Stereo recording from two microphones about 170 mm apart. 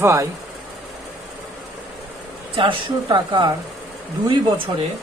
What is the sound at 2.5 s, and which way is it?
Speech, 30° right (ahead or behind).